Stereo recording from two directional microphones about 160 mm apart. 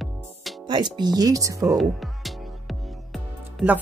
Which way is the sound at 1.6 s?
Centre (ahead or behind).